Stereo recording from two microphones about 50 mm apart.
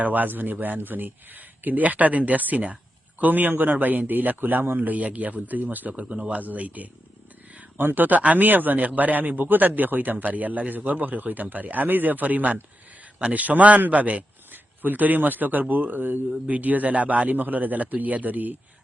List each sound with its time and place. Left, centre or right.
0.0 s a man's voice: right
4.8 s a man's voice: right
5.9 s speech: right
7.8 s a man's voice: right